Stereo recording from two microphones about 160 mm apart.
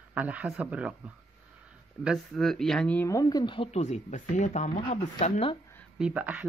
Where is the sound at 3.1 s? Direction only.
25° left (ahead or behind); by 4.6 s 50° left (ahead or behind).